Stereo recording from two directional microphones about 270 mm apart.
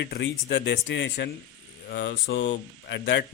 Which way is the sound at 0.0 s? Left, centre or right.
Left.